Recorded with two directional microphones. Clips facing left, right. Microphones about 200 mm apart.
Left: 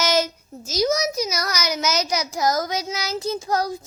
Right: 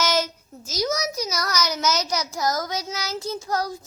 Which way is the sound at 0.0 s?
15° left (ahead or behind).